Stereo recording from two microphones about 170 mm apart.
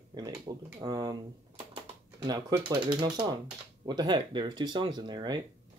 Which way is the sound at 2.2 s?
25° right (ahead or behind).